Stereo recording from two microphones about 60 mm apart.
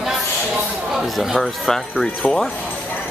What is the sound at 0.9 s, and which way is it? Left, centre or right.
Speech, centre.